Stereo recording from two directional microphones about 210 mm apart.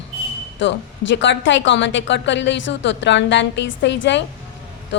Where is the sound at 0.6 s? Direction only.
60° left (ahead or behind).